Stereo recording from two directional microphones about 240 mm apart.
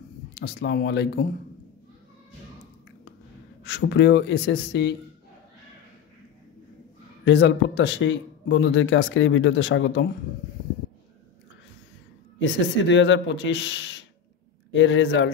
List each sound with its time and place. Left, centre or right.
0.3 s speech: left
3.6 s speech: left
7.2 s speech: left
12.4 s speech: left